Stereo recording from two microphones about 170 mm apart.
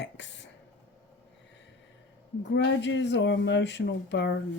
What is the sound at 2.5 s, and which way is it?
Speech, 90° left.